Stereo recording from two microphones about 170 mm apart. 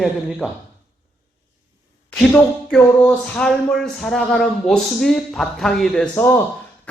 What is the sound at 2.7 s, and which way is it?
Speech, 5° left (ahead or behind).